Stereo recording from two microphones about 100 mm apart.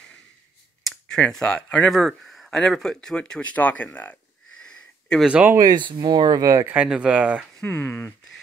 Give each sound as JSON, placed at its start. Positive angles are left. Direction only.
{"t": 0.8, "sound": "speech", "side_deg": 5}
{"t": 5.2, "sound": "speech", "side_deg": -15}
{"t": 5.6, "sound": "speech", "side_deg": -45}
{"t": 6.6, "sound": "speech", "side_deg": -10}
{"t": 7.6, "sound": "speech", "side_deg": 15}